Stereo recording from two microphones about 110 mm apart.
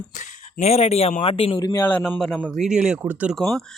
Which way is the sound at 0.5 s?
75° left (ahead or behind).